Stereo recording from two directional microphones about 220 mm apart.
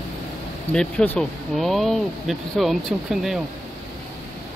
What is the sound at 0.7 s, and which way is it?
Speech, 5° left (ahead or behind).